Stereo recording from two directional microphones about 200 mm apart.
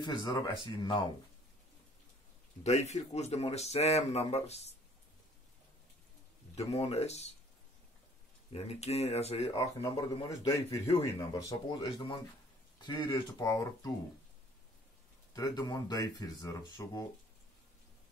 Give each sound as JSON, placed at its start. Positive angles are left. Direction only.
{"t": 0.0, "sound": "speech", "side_deg": 20}
{"t": 2.6, "sound": "speech", "side_deg": 35}
{"t": 6.5, "sound": "speech", "side_deg": 30}
{"t": 8.5, "sound": "speech", "side_deg": 30}
{"t": 9.6, "sound": "a man's voice", "side_deg": 15}
{"t": 15.3, "sound": "speech", "side_deg": 20}